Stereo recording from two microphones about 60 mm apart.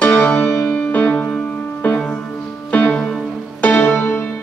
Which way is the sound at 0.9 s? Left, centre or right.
Left.